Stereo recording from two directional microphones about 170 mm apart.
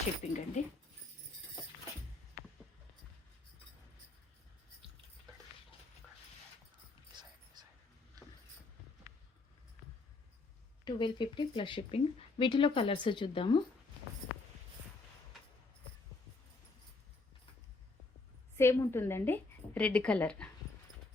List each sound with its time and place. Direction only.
0.2 s speech: 45° left (ahead or behind)
7.1 s whispering: 25° right (ahead or behind)
10.8 s speech: 25° left (ahead or behind)
18.5 s a woman's voice: 15° left (ahead or behind)